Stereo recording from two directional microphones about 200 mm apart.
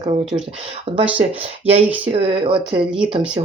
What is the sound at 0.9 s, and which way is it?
Speech, 30° right (ahead or behind).